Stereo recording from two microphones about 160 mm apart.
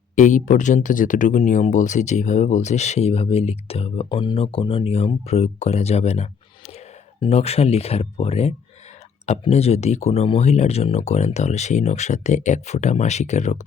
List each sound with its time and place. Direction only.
0.2 s speech: 55° left (ahead or behind)